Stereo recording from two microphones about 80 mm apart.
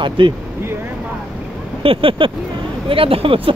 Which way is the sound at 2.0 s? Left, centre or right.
Right.